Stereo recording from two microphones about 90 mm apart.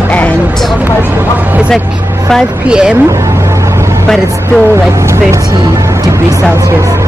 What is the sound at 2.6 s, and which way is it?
Speech, 10° right (ahead or behind).